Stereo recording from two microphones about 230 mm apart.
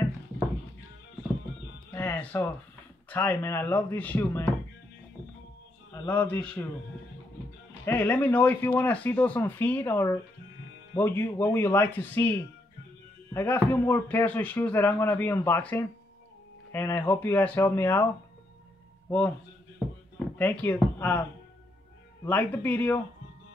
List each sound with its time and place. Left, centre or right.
1.9 s music: centre
3.1 s speech: centre
6.0 s speech: centre
7.8 s speech: centre
19.0 s a man's voice: centre
20.3 s speech: centre
22.2 s speech: centre